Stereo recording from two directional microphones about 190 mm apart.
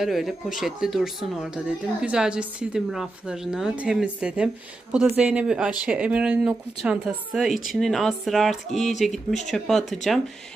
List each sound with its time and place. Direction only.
0.0 s speech: centre (ahead or behind)